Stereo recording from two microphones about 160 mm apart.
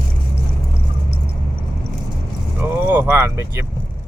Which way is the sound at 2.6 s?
15° right (ahead or behind).